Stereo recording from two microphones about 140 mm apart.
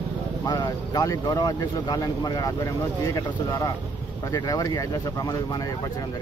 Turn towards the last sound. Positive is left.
turn(degrees=25)  # may be behind; listen again after turning